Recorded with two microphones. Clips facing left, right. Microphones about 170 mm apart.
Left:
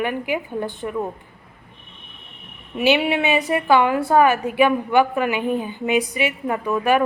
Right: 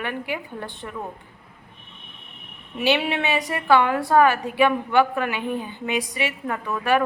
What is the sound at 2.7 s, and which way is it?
A woman's voice, 15° left (ahead or behind).